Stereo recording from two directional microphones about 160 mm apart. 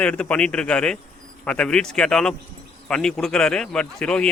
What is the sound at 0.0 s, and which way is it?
A man's voice, 5° left (ahead or behind).